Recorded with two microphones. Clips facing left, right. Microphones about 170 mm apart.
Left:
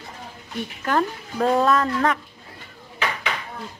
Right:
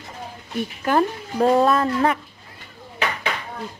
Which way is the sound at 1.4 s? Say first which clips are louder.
Right 3 dB; 25° right (ahead or behind).